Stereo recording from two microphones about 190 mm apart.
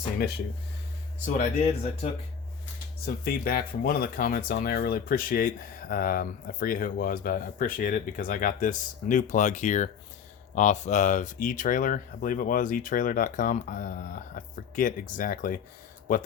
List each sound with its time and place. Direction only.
1.4 s speech: 35° left (ahead or behind)
3.2 s speech: 55° left (ahead or behind)